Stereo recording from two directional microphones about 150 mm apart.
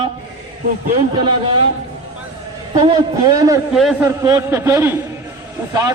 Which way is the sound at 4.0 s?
20° right (ahead or behind).